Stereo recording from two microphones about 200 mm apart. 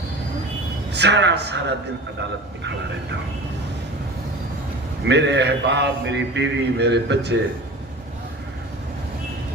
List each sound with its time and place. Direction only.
0.9 s mantra: 55° right (ahead or behind)
5.0 s mantra: 60° right (ahead or behind)